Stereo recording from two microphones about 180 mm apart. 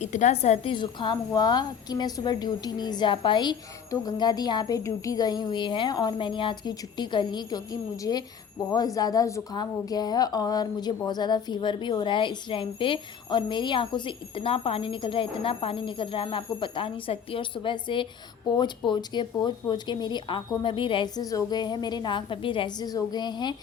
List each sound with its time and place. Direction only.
0.0 s a woman's voice: 40° left (ahead or behind); by 23.6 s 25° left (ahead or behind)